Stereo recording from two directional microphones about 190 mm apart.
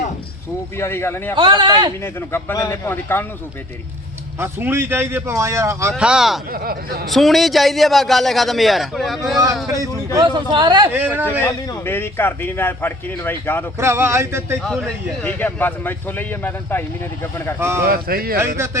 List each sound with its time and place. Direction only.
0.8 s a man's voice: 15° left (ahead or behind)
1.4 s a man's voice: 25° right (ahead or behind)
2.3 s a man's voice: 15° left (ahead or behind)
4.4 s a man's voice: 10° right (ahead or behind)
5.9 s a man's voice: 5° right (ahead or behind)
6.5 s speech: 50° right (ahead or behind)
7.1 s a man's voice: centre (ahead or behind)
9.7 s a man's voice: 20° right (ahead or behind)
10.9 s a man's voice: 10° right (ahead or behind)
11.3 s a man's voice: 10° left (ahead or behind)
13.7 s a man's voice: 15° right (ahead or behind)
14.6 s a man's voice: 5° left (ahead or behind)
17.8 s speech: 50° right (ahead or behind)
18.3 s a man's voice: 15° right (ahead or behind)